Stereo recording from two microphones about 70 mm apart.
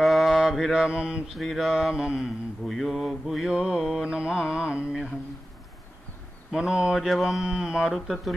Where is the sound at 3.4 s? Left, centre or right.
Centre.